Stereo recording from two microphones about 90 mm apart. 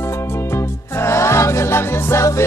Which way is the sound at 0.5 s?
30° left (ahead or behind).